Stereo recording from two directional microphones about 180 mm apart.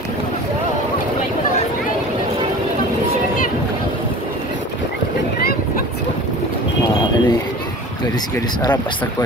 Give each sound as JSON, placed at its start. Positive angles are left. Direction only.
{"t": 6.9, "sound": "pigeon", "side_deg": 25}